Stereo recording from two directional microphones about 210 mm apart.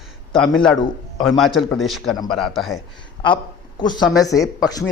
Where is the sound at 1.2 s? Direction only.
Centre (ahead or behind).